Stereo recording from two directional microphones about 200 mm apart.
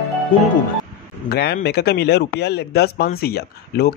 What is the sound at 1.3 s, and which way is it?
Speech, 55° left (ahead or behind).